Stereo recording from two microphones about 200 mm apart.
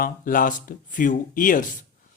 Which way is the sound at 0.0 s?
40° left (ahead or behind).